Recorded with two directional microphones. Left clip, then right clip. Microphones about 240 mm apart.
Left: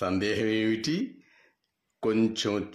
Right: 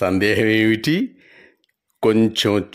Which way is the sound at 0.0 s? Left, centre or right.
Right.